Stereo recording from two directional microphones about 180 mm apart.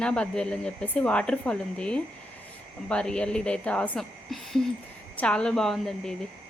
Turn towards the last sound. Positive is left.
turn(degrees=0)  # may be behind; listen again after turning